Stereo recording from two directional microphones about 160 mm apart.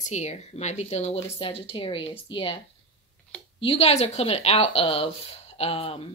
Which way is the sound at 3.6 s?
40° left (ahead or behind).